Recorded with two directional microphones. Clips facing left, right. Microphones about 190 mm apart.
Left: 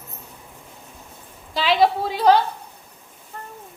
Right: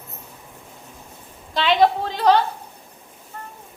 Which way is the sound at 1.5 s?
5° left (ahead or behind).